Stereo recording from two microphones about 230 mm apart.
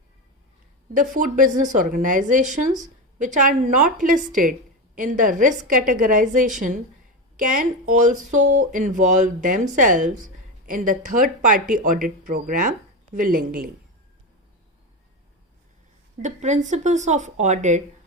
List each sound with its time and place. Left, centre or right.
0.9 s speech: right
16.2 s speech: right